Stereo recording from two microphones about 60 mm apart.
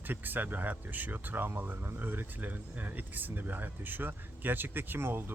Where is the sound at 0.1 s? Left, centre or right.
Right.